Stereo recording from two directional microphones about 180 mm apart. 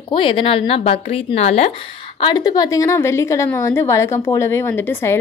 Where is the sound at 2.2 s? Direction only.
20° left (ahead or behind).